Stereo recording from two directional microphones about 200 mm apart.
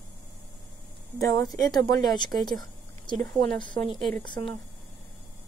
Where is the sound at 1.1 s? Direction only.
20° left (ahead or behind).